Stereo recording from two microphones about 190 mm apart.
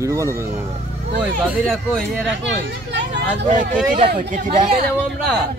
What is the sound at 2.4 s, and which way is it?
Speech, 65° right (ahead or behind).